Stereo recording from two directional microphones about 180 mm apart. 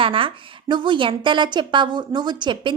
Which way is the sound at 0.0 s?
30° right (ahead or behind).